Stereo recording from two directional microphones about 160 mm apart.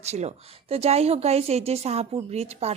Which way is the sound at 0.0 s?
45° right (ahead or behind).